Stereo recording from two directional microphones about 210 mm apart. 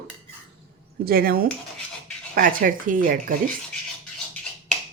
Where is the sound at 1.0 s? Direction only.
45° right (ahead or behind).